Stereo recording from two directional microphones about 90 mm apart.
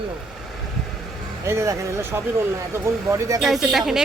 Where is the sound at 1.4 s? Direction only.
35° right (ahead or behind).